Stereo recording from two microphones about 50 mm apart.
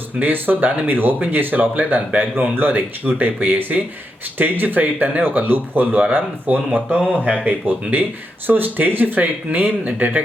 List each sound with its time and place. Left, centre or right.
0.2 s speech: right